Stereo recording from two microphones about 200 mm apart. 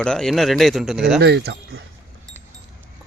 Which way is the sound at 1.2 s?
55° right (ahead or behind).